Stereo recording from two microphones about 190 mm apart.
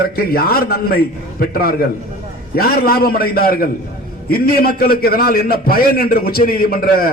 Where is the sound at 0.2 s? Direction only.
50° left (ahead or behind).